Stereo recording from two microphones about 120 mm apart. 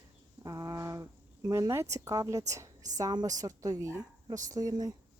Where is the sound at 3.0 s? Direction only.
35° right (ahead or behind).